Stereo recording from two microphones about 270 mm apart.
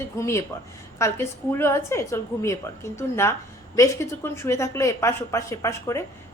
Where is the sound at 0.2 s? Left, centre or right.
Centre.